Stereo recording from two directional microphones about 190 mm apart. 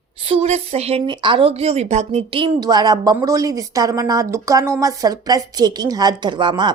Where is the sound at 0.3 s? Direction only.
35° right (ahead or behind).